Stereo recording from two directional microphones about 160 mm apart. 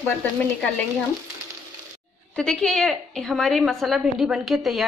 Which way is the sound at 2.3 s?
5° left (ahead or behind).